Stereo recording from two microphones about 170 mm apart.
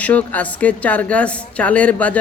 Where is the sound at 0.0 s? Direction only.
10° left (ahead or behind).